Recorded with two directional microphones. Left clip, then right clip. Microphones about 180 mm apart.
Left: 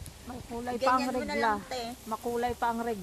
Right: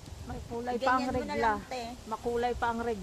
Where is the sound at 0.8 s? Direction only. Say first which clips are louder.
Left 2 dB; 40° left (ahead or behind); by 3.0 s 60° left (ahead or behind).